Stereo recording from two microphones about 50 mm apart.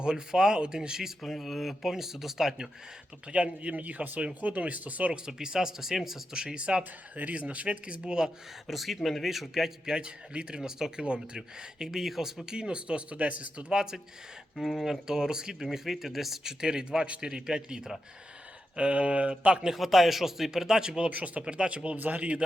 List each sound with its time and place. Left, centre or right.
0.0 s a man's voice: centre
1.2 s speech: centre
3.3 s speech: right
5.1 s a man's voice: centre
7.2 s speech: right
8.6 s a man's voice: centre; by 13.7 s right
13.7 s a man's voice: centre
14.5 s speech: centre
15.0 s a man's voice: centre
19.7 s a man's voice: centre
21.1 s speech: right
21.9 s speech: right